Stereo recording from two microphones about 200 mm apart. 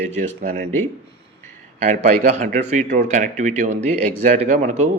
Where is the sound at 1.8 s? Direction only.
35° right (ahead or behind).